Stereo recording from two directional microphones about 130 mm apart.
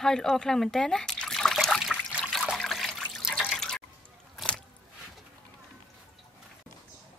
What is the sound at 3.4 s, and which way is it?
Water, 5° left (ahead or behind).